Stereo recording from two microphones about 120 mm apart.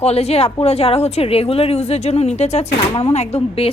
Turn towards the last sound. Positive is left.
turn(degrees=60)  # may be behind; listen again after turning